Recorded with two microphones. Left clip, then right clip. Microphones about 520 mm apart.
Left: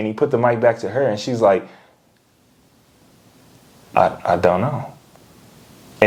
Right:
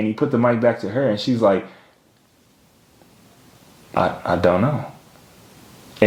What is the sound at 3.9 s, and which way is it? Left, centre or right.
Speech, left.